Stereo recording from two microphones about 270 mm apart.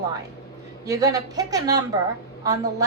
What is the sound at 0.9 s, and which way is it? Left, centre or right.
A woman's voice, centre.